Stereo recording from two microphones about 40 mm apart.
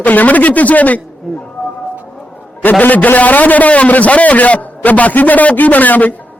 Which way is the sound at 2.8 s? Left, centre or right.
Left.